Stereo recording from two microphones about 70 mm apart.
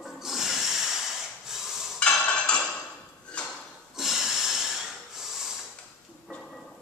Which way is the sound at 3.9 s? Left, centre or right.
Centre.